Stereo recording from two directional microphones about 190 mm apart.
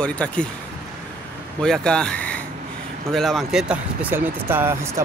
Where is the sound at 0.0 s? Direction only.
5° left (ahead or behind).